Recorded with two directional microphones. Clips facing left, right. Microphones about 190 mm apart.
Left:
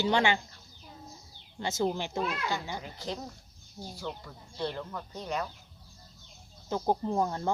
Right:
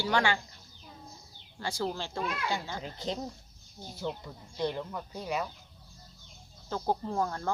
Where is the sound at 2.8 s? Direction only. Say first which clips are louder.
Right 2 dB; 20° right (ahead or behind).